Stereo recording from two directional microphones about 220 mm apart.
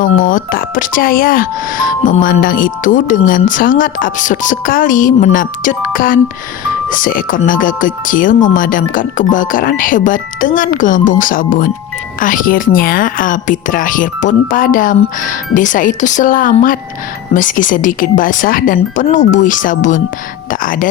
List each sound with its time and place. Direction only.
0.3 s speech: 40° left (ahead or behind)